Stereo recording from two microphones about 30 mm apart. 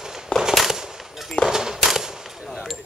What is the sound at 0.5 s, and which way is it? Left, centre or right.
Fireworks, centre.